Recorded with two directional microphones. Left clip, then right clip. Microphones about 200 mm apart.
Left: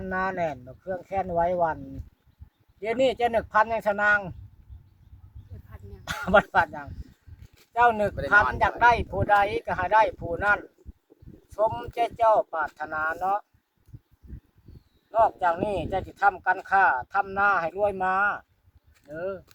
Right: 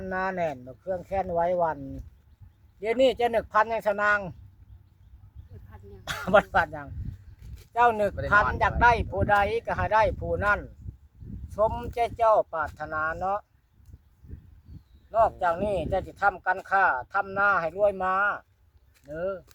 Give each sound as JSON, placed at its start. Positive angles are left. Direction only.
{"t": 0.0, "sound": "speech", "side_deg": -20}
{"t": 2.8, "sound": "speech", "side_deg": -20}
{"t": 5.5, "sound": "dog", "side_deg": 20}
{"t": 6.1, "sound": "speech", "side_deg": -20}
{"t": 7.3, "sound": "a sound", "side_deg": -20}
{"t": 8.8, "sound": "speech", "side_deg": -20}
{"t": 15.1, "sound": "speech", "side_deg": -20}